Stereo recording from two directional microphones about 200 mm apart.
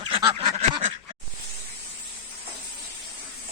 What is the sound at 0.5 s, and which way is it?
Quack, 35° right (ahead or behind).